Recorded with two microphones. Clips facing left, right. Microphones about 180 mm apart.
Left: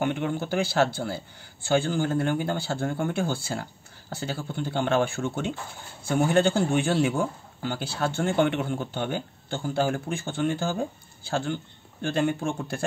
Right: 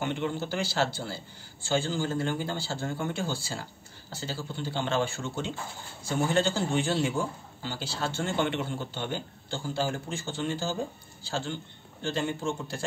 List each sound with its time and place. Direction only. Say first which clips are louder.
0.0 s a man's voice: left 4 dB; 55° left (ahead or behind)